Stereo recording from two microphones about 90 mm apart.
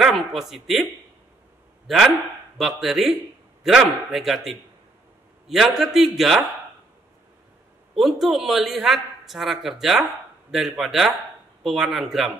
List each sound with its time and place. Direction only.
0.0 s a man's voice: centre (ahead or behind)
1.9 s a man's voice: 5° right (ahead or behind)
5.5 s a man's voice: 5° right (ahead or behind)
7.9 s a man's voice: centre (ahead or behind)